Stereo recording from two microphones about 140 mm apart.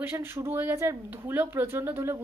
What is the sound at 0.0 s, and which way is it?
A woman's voice, 15° right (ahead or behind).